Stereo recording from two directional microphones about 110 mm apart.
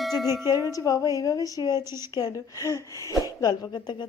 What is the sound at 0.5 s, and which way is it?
A woman's voice, 30° left (ahead or behind).